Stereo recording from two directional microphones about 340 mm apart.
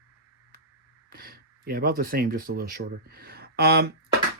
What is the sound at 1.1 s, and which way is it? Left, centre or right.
Speech, right.